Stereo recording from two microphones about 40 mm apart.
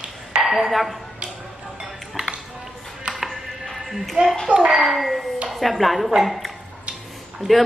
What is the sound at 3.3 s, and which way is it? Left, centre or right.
Music, centre.